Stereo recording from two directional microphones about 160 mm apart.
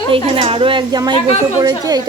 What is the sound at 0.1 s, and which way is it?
A woman's voice, 35° right (ahead or behind).